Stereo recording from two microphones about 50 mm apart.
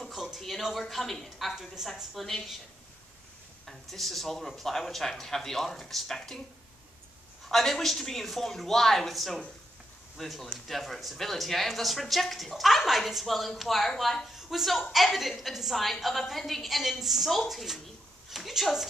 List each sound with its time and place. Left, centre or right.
0.0 s a sound: centre
1.5 s a woman's voice: centre
3.6 s speech: centre
7.4 s speech: centre